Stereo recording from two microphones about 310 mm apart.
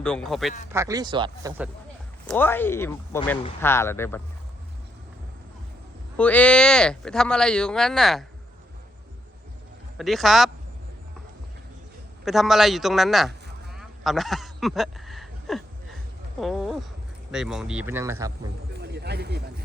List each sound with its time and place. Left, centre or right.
0.0 s speech: centre
0.7 s speech: centre
2.2 s speech: centre
6.1 s speech: centre
10.0 s speech: centre
12.2 s a sound: centre
16.4 s speech: centre
18.7 s a sound: right